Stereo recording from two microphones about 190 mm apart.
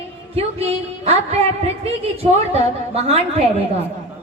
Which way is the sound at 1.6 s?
30° right (ahead or behind).